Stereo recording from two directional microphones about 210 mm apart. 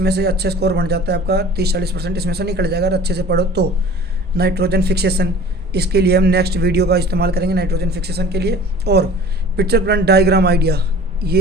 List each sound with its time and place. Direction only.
0.0 s speech: 50° right (ahead or behind)